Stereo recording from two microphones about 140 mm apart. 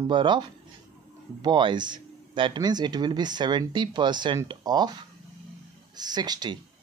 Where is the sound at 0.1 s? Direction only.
35° right (ahead or behind).